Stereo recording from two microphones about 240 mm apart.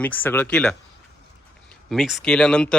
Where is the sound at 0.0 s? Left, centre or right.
Centre.